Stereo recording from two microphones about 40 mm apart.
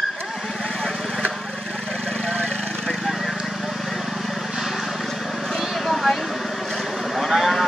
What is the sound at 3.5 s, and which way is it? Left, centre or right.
Vehicle, centre.